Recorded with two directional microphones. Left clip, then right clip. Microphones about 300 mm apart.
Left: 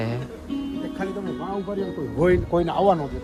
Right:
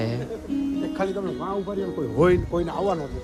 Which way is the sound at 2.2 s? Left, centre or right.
Centre.